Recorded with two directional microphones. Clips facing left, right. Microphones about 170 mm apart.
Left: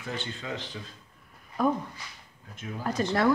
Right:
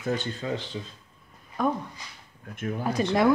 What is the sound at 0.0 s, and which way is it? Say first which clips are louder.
Speech: right 7 dB; 45° right (ahead or behind).